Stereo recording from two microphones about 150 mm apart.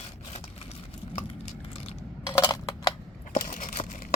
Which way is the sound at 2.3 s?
25° left (ahead or behind).